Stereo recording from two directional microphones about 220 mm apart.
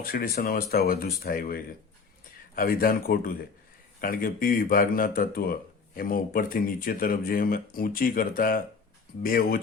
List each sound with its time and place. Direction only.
0.0 s speech: 40° left (ahead or behind)